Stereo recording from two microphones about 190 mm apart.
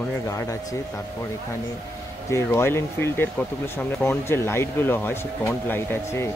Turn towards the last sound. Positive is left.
turn(degrees=10)  # may be behind; listen again after turning